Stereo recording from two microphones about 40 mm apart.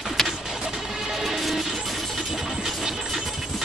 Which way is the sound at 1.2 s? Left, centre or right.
Centre.